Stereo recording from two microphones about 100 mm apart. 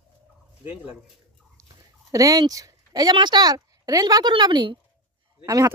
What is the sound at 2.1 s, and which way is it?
A woman's voice, 35° right (ahead or behind).